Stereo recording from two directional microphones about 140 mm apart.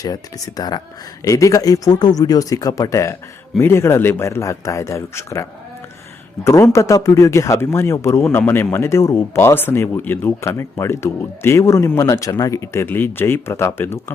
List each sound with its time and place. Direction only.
0.0 s speech: 25° left (ahead or behind)